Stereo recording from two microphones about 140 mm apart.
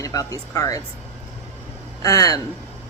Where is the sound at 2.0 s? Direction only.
25° left (ahead or behind).